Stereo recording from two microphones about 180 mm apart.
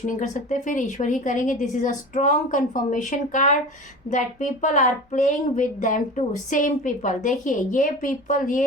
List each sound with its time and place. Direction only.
0.2 s speech: 45° left (ahead or behind)